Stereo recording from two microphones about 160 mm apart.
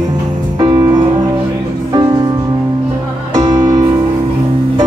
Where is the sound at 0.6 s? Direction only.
30° right (ahead or behind).